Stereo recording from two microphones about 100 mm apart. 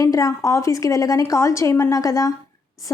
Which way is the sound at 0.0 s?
35° left (ahead or behind).